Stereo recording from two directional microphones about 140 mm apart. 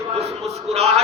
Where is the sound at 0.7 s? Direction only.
50° right (ahead or behind).